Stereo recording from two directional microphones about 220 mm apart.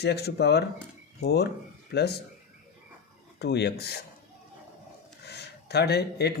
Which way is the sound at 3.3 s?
50° left (ahead or behind).